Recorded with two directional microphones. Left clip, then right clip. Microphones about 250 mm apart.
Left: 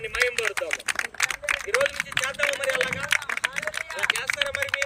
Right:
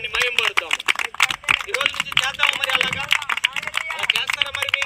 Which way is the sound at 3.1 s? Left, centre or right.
Centre.